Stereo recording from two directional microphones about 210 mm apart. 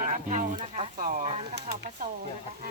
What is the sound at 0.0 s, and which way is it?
Speech, 35° right (ahead or behind).